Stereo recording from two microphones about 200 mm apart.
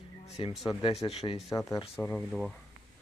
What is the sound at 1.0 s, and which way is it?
Speech, 30° left (ahead or behind).